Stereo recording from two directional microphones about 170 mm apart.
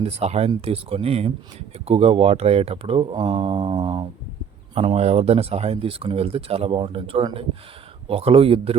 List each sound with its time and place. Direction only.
0.0 s speech: 40° right (ahead or behind)